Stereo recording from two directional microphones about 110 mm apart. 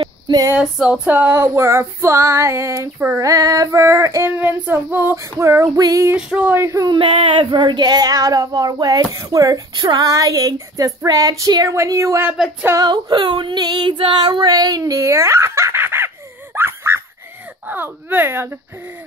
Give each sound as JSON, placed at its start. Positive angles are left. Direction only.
{"t": 0.0, "sound": "female singing", "side_deg": -35}
{"t": 0.6, "sound": "female singing", "side_deg": -10}
{"t": 6.1, "sound": "female singing", "side_deg": -15}
{"t": 6.9, "sound": "child singing", "side_deg": -50}
{"t": 16.5, "sound": "a sound", "side_deg": -20}
{"t": 17.6, "sound": "female singing", "side_deg": -20}